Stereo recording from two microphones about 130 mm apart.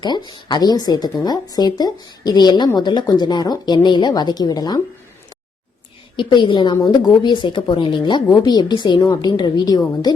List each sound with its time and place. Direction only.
0.0 s speech: 35° left (ahead or behind)
6.1 s speech: 40° left (ahead or behind)